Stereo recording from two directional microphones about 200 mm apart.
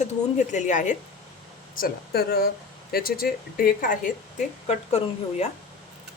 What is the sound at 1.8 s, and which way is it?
Speech, 50° left (ahead or behind).